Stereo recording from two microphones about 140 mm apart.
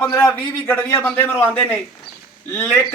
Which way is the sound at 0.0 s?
20° left (ahead or behind).